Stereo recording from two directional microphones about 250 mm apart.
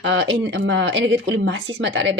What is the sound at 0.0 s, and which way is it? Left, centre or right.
Speech, right.